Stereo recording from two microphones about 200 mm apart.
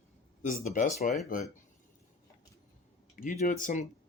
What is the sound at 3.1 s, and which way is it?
Speech, 40° left (ahead or behind).